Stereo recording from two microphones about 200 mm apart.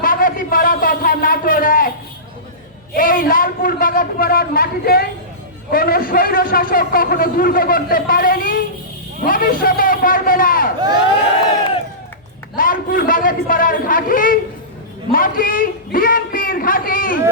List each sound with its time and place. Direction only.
0.0 s a sound: 45° left (ahead or behind)
2.9 s a man's voice: 45° left (ahead or behind)
12.5 s a man's voice: 45° left (ahead or behind)